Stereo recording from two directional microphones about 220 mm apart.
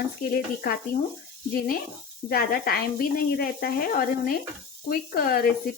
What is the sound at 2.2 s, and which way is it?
Speech, 45° left (ahead or behind).